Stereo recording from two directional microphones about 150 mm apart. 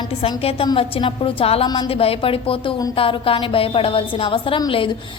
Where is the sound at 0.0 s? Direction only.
35° left (ahead or behind).